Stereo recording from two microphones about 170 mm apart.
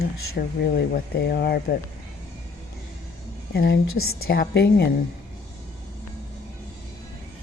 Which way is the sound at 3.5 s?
70° left (ahead or behind).